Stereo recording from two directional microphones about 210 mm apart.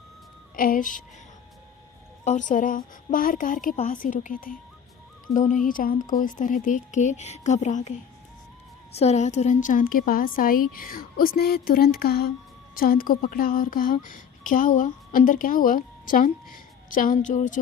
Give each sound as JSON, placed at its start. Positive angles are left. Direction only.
{"t": 0.5, "sound": "a woman's voice", "side_deg": 40}
{"t": 2.2, "sound": "speech", "side_deg": 35}
{"t": 9.0, "sound": "a woman's voice", "side_deg": 30}